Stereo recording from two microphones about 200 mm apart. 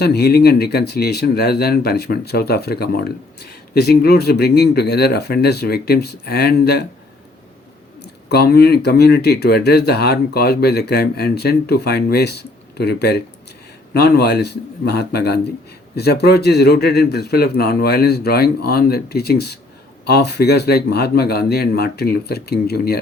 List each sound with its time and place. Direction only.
0.0 s speech: 50° left (ahead or behind)
8.3 s speech: 55° left (ahead or behind)